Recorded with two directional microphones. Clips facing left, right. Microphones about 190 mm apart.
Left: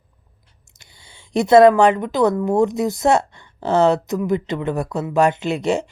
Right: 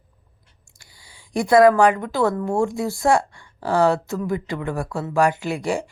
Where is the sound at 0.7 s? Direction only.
20° left (ahead or behind).